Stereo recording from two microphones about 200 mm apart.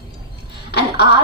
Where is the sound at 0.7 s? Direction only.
55° left (ahead or behind).